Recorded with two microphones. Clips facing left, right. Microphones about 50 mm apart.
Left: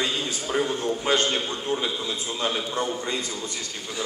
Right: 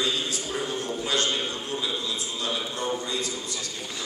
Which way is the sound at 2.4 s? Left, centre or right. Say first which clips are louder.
Left 5 dB; left.